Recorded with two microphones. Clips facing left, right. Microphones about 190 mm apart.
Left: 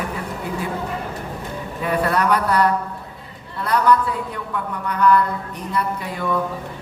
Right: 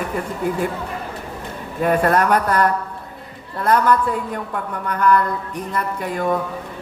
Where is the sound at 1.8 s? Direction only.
50° right (ahead or behind).